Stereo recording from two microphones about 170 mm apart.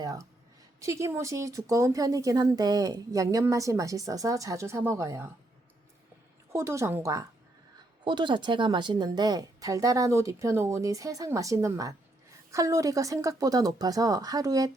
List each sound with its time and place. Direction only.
0.0 s a sound: 20° right (ahead or behind)
0.8 s speech: 20° right (ahead or behind)
6.5 s a woman's voice: 15° right (ahead or behind)